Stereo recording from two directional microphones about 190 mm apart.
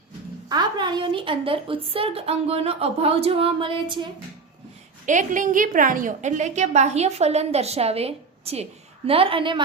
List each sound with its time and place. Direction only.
0.4 s a woman's voice: 20° right (ahead or behind)
5.0 s a woman's voice: 40° right (ahead or behind); by 9.6 s 25° right (ahead or behind)